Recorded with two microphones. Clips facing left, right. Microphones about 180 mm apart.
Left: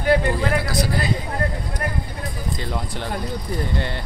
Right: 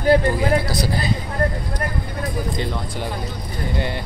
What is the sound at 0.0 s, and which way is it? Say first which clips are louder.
Speech: right 3 dB; 35° right (ahead or behind).